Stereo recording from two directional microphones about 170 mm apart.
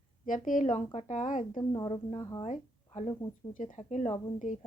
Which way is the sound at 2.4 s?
40° left (ahead or behind).